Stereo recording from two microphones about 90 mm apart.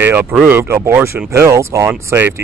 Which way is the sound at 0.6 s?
30° right (ahead or behind).